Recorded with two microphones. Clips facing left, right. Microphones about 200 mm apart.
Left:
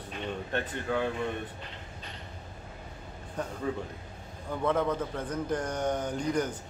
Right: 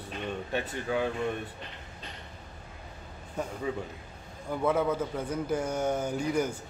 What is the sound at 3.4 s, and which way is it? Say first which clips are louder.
A man's voice: even; 5° right (ahead or behind).